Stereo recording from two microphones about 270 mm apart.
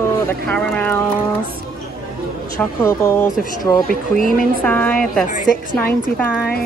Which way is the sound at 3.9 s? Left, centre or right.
Left.